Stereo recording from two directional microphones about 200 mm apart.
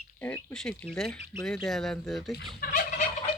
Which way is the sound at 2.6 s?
45° left (ahead or behind).